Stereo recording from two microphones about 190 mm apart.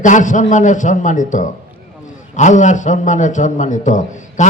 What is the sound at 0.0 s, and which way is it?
A man's voice, 40° left (ahead or behind).